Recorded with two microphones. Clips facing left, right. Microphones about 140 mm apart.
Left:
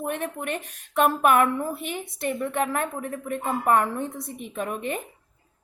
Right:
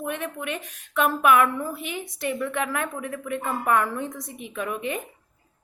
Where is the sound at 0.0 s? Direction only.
40° left (ahead or behind).